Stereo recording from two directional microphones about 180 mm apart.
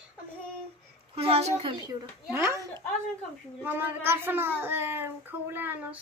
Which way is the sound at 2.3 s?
15° right (ahead or behind).